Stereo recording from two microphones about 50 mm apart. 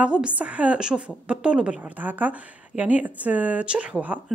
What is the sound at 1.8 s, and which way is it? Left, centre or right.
A woman's voice, right.